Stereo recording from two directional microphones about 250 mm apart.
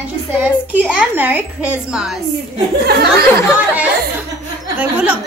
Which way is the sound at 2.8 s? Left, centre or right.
Right.